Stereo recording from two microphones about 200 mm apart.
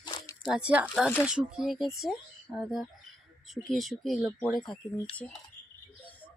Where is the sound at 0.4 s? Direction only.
5° right (ahead or behind).